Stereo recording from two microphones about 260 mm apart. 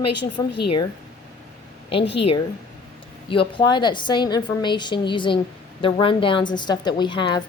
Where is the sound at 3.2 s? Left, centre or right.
Centre.